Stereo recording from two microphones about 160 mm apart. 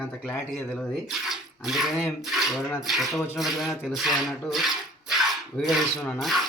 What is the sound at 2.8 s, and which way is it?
Speech, centre (ahead or behind).